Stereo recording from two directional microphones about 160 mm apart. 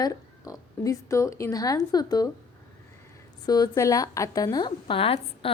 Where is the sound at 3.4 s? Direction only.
25° left (ahead or behind).